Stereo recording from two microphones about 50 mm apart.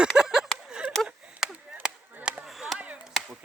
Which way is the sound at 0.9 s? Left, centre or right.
Centre.